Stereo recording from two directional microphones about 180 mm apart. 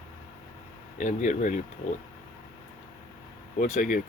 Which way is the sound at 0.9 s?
45° left (ahead or behind).